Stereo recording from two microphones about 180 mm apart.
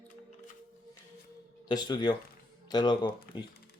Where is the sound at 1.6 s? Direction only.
25° left (ahead or behind).